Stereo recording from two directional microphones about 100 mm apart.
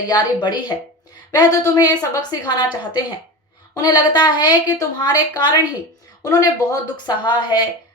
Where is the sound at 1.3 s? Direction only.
40° left (ahead or behind).